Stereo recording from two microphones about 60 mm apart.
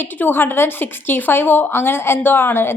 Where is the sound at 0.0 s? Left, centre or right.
Left.